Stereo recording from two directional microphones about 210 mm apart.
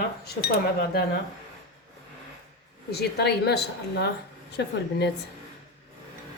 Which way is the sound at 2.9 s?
50° left (ahead or behind).